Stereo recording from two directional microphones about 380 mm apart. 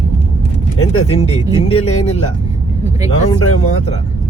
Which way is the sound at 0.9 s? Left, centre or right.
Centre.